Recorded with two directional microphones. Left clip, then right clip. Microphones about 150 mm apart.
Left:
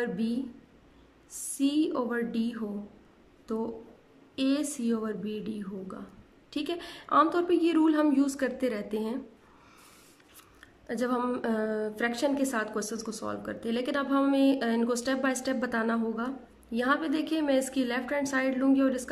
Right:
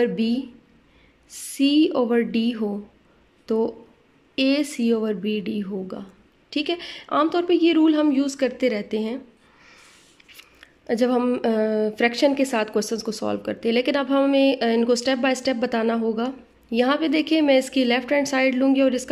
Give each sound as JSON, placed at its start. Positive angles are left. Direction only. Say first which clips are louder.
{"t": 0.0, "sound": "speech", "louder": "right 10 dB", "side_deg": -15}
{"t": 10.3, "sound": "speech", "louder": "right 9 dB", "side_deg": -10}